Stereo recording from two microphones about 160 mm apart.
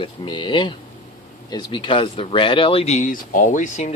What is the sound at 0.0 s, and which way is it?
Speech, 30° left (ahead or behind).